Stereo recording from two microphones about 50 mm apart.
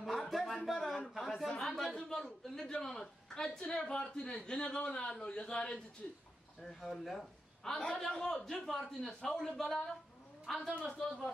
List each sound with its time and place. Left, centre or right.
0.0 s a sound: centre
1.6 s a man's voice: centre; by 6.2 s left
6.6 s a man's voice: centre
10.7 s a man's voice: centre